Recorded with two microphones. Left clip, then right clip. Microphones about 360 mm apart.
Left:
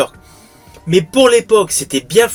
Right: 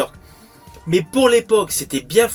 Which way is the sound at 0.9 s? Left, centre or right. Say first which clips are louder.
Left 5 dB; right.